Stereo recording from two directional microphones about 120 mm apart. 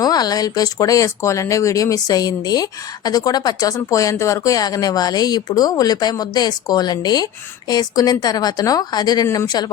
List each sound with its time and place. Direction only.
0.0 s speech: 35° left (ahead or behind)